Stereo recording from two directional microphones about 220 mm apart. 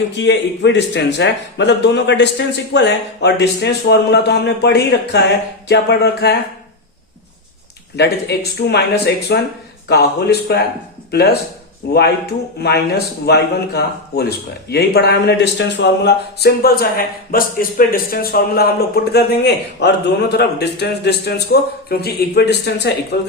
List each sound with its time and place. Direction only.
0.2 s speech: 55° left (ahead or behind)
7.9 s speech: 50° left (ahead or behind)